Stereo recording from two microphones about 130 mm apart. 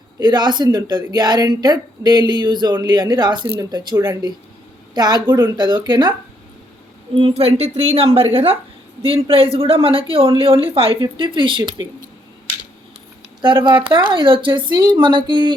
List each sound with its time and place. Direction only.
0.2 s speech: 35° right (ahead or behind)
3.9 s speech: 20° right (ahead or behind)
4.9 s speech: 35° right (ahead or behind)
7.2 s speech: 45° right (ahead or behind)
13.4 s speech: 40° right (ahead or behind)